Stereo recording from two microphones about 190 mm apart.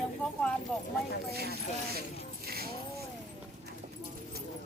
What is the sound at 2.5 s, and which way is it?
Dog, 55° right (ahead or behind).